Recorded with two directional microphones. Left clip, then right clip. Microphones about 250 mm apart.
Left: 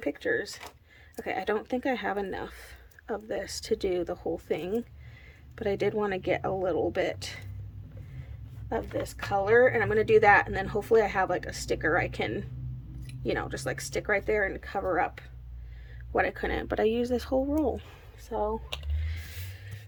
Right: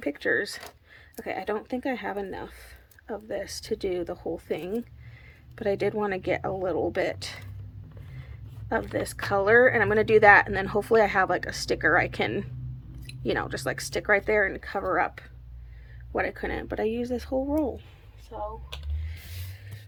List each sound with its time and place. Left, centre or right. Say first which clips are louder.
0.0 s speech: right 3 dB; centre
8.7 s speech: right 4 dB; centre
18.3 s speech: left 5 dB; left